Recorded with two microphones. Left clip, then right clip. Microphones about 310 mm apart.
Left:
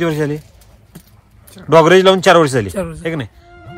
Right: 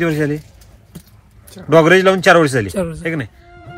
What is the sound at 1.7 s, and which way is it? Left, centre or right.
Speech, centre.